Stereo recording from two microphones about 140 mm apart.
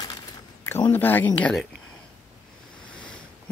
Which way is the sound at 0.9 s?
15° left (ahead or behind).